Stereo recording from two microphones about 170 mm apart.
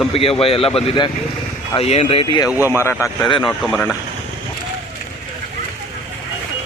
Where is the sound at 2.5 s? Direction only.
10° right (ahead or behind).